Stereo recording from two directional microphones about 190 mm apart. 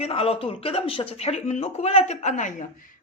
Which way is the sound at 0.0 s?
30° left (ahead or behind).